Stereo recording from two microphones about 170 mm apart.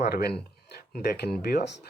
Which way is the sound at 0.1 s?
65° left (ahead or behind).